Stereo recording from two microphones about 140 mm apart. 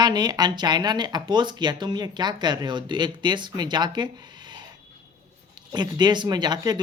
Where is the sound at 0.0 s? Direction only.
30° right (ahead or behind).